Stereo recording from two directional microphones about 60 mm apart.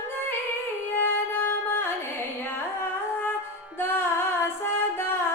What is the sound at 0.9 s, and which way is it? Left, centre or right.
Music, left.